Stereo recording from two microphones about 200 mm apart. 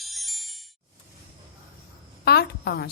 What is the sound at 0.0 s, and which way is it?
Music, centre (ahead or behind).